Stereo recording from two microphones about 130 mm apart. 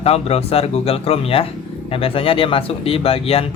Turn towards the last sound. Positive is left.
turn(degrees=50)  # may be behind; listen again after turning